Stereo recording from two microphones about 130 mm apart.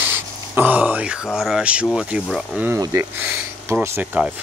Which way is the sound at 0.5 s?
10° right (ahead or behind).